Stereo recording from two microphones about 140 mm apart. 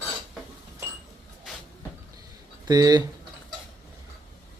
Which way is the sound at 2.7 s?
30° right (ahead or behind).